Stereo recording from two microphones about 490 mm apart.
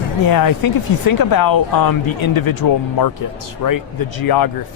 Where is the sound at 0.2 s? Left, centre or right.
Left.